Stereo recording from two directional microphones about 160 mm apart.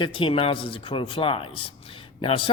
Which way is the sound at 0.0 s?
30° left (ahead or behind).